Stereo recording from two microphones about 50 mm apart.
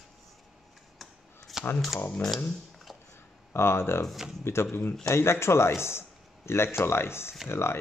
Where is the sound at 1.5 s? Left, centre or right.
Centre.